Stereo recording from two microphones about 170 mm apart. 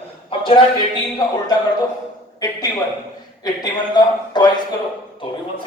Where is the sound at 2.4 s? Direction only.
25° left (ahead or behind).